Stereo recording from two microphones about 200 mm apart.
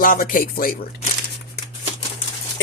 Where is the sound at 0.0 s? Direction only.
45° left (ahead or behind).